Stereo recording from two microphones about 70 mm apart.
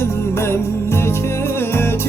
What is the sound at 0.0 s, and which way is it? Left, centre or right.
Music, left.